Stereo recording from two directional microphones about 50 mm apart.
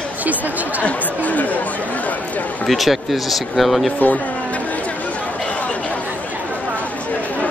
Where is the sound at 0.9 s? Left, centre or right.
Left.